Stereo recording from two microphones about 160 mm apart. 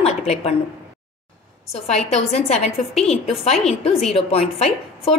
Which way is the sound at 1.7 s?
40° left (ahead or behind).